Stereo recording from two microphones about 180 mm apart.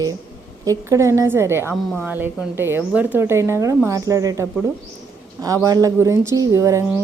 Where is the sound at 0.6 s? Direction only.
15° right (ahead or behind).